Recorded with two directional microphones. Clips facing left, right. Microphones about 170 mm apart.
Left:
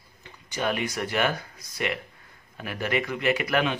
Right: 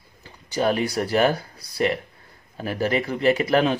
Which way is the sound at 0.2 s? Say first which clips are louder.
Right 6 dB; 35° right (ahead or behind).